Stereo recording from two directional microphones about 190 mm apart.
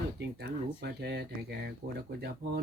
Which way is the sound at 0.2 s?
60° right (ahead or behind).